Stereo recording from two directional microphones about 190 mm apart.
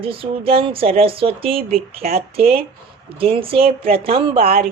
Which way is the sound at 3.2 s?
30° right (ahead or behind).